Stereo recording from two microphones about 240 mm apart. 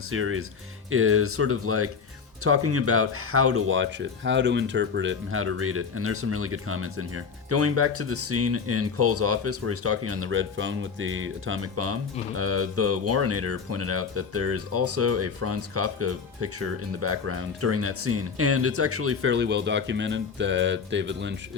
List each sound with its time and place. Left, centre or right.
0.1 s speech: right